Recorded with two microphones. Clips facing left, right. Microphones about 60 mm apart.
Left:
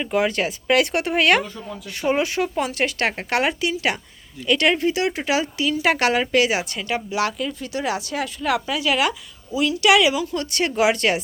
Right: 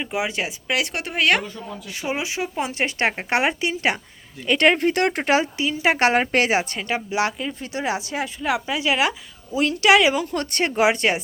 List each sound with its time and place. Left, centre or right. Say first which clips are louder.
0.0 s speech: left 4 dB; centre
2.6 s speech: right 3 dB; right
5.4 s speech: left 1 dB; right
9.6 s speech: even; right
10.6 s speech: even; right